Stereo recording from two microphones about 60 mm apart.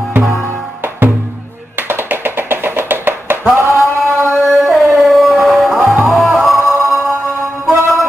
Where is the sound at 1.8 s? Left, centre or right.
Right.